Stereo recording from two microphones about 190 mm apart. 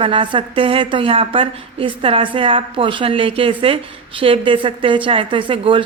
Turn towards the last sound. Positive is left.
turn(degrees=-25)  # may be behind; listen again after turning